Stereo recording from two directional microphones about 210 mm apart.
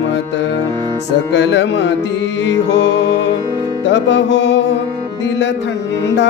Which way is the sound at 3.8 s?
55° left (ahead or behind).